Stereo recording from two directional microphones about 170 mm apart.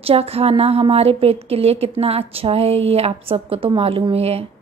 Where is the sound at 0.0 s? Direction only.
35° right (ahead or behind).